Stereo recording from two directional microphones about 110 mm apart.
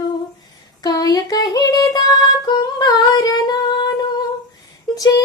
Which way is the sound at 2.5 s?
40° left (ahead or behind).